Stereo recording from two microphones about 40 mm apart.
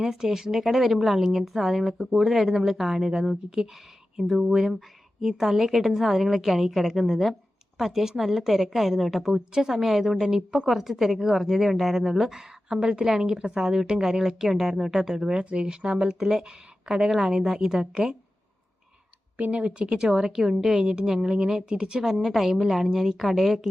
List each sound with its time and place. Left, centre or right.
0.0 s a woman's voice: centre
12.6 s a woman's voice: right
19.4 s a woman's voice: right
22.0 s a woman's voice: centre